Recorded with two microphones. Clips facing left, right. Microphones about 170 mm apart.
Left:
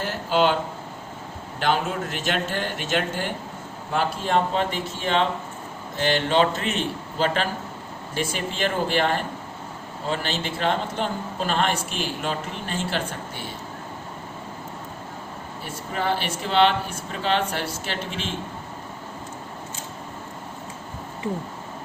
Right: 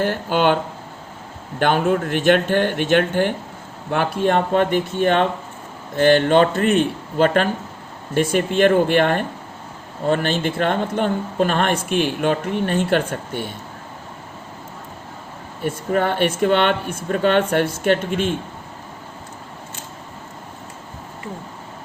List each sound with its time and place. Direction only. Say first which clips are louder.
0.0 s speech: right 3 dB; 55° right (ahead or behind)
1.5 s a man's voice: right 6 dB; 55° right (ahead or behind)
15.6 s speech: right 7 dB; 55° right (ahead or behind)